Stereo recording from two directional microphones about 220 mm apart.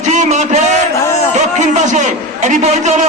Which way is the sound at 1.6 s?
35° right (ahead or behind).